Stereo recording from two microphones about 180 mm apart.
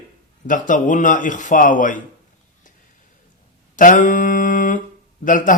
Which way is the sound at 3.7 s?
45° left (ahead or behind).